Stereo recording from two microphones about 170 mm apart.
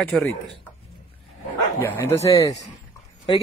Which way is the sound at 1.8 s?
15° left (ahead or behind).